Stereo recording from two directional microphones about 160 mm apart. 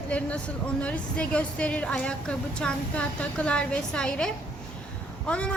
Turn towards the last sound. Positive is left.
turn(degrees=5)  # may be behind; listen again after turning